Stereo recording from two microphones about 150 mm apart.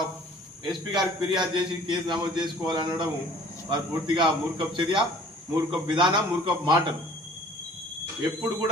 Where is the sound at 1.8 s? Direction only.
30° right (ahead or behind).